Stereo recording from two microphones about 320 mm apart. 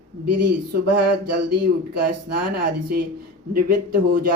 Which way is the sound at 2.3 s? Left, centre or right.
Right.